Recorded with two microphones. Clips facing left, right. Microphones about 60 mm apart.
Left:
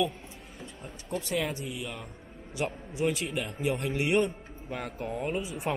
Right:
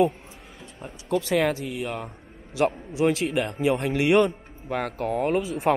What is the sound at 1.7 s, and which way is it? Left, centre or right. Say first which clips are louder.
Speech: right 7 dB; right.